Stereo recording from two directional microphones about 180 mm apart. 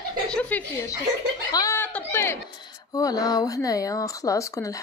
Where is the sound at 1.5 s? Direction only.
15° left (ahead or behind).